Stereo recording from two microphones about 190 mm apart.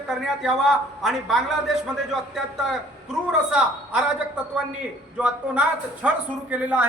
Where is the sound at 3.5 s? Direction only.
5° right (ahead or behind).